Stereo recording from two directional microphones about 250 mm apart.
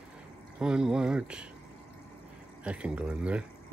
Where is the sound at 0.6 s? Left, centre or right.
Centre.